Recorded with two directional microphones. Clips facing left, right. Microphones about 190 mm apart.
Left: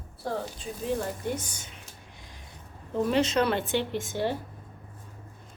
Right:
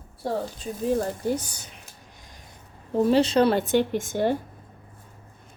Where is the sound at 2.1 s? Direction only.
45° right (ahead or behind).